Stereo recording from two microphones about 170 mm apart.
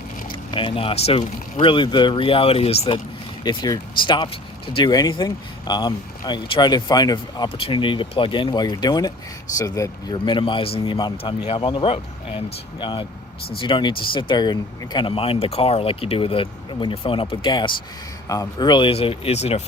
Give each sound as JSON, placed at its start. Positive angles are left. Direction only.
{"t": 0.5, "sound": "speech", "side_deg": 30}
{"t": 3.4, "sound": "speech", "side_deg": 25}